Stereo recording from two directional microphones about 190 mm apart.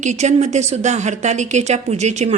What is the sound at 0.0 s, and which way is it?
Speech, 35° right (ahead or behind).